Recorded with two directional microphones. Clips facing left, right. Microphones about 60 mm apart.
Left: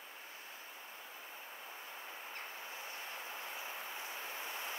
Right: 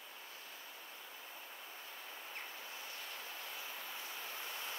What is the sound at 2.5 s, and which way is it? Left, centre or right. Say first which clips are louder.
Vehicle: left 2 dB; left.